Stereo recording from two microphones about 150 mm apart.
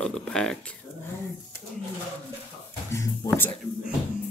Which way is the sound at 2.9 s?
15° left (ahead or behind).